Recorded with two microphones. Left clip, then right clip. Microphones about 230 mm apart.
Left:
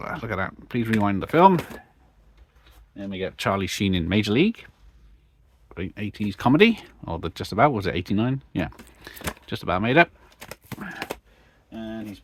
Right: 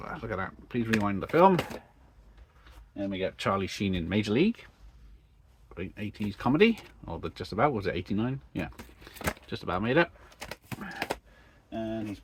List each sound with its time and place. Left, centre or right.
0.0 s speech: left
3.0 s speech: left
5.6 s speech: left
10.8 s a sound: left